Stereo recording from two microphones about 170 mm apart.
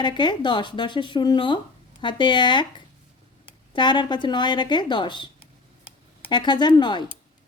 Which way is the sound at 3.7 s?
25° left (ahead or behind).